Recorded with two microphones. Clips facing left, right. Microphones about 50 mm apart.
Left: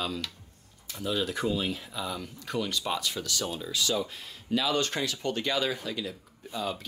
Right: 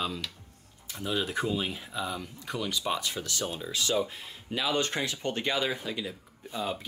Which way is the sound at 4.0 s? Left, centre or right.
Centre.